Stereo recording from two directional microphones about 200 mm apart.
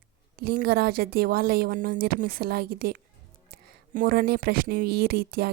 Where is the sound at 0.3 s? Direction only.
50° right (ahead or behind).